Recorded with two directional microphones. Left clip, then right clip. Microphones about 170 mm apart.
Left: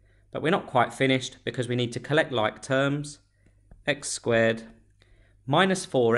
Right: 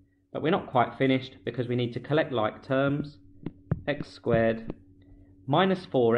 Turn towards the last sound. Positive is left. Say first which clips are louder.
# left 1 dB
turn(degrees=35)  # may be behind; listen again after turning